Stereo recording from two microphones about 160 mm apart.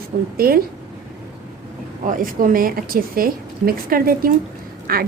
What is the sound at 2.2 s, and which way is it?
A woman's voice, 60° right (ahead or behind).